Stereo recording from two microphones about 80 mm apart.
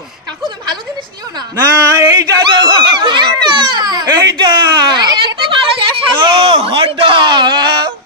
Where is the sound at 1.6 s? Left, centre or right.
Right.